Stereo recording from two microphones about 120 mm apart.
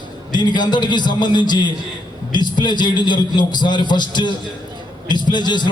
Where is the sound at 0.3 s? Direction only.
35° left (ahead or behind).